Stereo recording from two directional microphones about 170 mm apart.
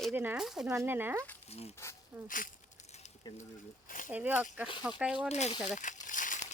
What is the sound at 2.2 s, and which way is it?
Speech, 50° left (ahead or behind).